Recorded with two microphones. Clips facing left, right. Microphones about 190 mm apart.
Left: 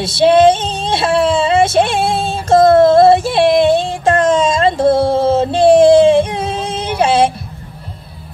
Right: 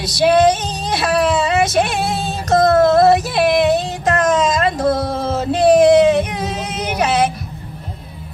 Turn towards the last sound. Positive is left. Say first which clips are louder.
# left 4 dB
turn(degrees=30)  # may be behind; listen again after turning